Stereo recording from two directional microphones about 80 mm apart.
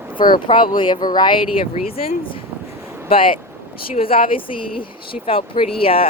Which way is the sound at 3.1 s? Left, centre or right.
Left.